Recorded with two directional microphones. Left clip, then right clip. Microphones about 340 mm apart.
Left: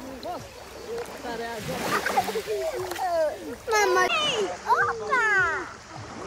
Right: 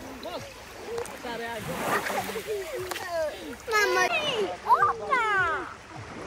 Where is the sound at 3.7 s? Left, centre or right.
Left.